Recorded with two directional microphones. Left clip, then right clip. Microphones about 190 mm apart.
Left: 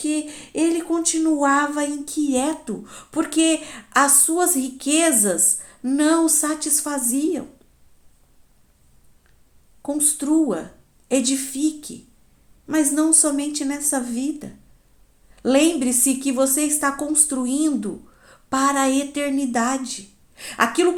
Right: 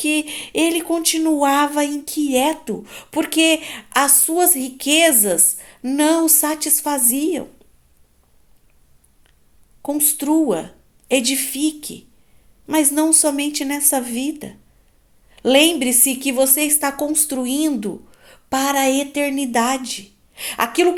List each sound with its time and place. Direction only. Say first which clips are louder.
0.0 s speech: right 5 dB; 35° right (ahead or behind)
9.8 s speech: right 2 dB; 25° right (ahead or behind)